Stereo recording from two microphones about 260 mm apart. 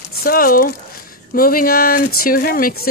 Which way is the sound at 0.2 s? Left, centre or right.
Left.